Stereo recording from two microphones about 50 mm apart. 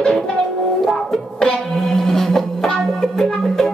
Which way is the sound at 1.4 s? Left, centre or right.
Centre.